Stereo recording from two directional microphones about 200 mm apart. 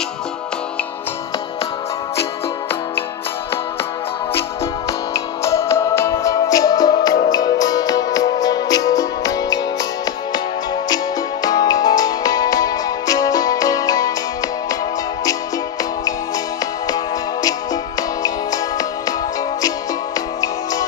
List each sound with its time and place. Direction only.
5.1 s music: 15° left (ahead or behind)
11.4 s music: 20° left (ahead or behind)
16.8 s music: 20° left (ahead or behind)
20.2 s music: 20° left (ahead or behind)